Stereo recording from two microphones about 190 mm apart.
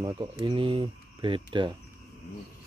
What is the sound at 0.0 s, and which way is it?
Speech, 20° right (ahead or behind).